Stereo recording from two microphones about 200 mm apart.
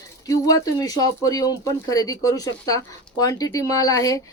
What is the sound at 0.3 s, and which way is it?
Speech, 15° left (ahead or behind).